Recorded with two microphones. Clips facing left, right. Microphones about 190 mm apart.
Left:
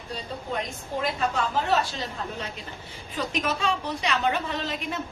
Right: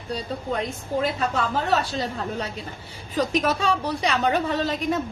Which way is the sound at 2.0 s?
35° right (ahead or behind).